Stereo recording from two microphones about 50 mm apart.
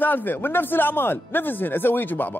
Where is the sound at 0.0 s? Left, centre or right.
Left.